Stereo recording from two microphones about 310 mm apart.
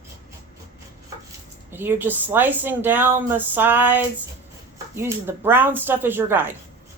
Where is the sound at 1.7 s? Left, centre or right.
Centre.